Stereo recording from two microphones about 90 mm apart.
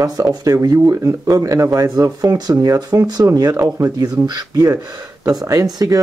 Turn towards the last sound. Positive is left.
turn(degrees=-40)  # may be behind; listen again after turning